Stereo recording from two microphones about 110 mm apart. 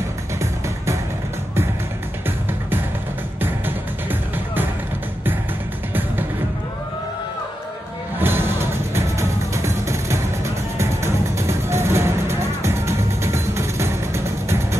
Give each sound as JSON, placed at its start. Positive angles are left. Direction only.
{"t": 3.3, "sound": "music", "side_deg": -20}
{"t": 8.2, "sound": "music", "side_deg": -20}